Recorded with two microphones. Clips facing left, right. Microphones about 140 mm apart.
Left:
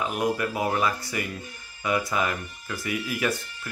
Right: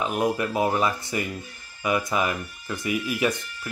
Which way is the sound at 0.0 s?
20° right (ahead or behind).